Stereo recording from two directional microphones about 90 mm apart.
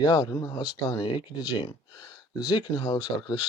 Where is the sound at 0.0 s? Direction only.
45° left (ahead or behind).